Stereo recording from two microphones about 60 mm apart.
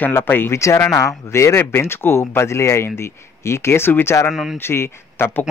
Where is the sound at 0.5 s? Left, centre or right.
Left.